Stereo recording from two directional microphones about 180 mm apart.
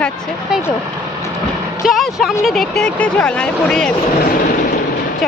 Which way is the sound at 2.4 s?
Centre (ahead or behind).